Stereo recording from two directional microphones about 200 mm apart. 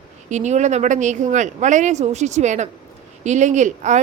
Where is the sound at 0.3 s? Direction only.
35° right (ahead or behind).